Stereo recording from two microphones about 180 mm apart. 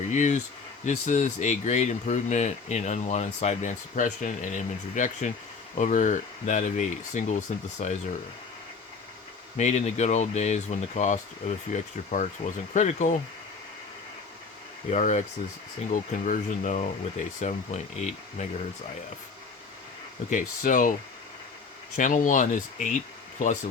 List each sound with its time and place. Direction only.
0.1 s speech: 45° left (ahead or behind)
9.6 s speech: 40° left (ahead or behind)
14.8 s speech: 40° left (ahead or behind)
20.3 s speech: 45° left (ahead or behind)
21.9 s speech: 45° left (ahead or behind)